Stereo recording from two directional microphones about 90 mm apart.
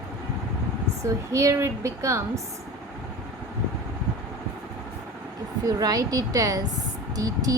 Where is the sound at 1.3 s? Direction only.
35° right (ahead or behind).